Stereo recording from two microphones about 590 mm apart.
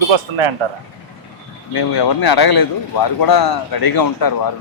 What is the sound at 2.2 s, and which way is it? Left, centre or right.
A man's voice, left.